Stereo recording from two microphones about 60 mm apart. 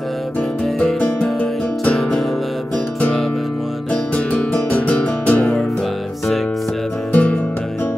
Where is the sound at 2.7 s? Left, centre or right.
Centre.